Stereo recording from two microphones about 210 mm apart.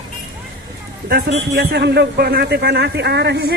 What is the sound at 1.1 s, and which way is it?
A man's voice, 50° right (ahead or behind).